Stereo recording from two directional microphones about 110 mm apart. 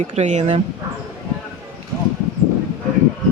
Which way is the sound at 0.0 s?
90° right.